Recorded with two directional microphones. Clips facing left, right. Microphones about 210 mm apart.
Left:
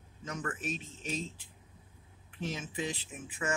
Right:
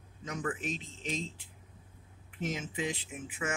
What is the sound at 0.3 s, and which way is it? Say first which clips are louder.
Speech: right 3 dB; 15° right (ahead or behind).